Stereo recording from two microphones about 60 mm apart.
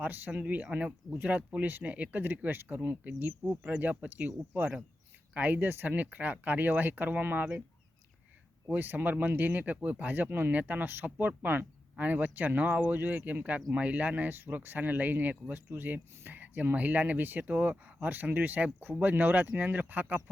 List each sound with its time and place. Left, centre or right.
0.3 s speech: right
8.7 s speech: right